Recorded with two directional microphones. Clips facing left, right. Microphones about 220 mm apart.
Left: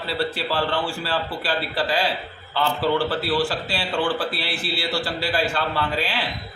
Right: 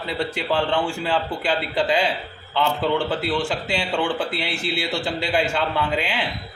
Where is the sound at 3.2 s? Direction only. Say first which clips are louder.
Left 1 dB; 20° right (ahead or behind).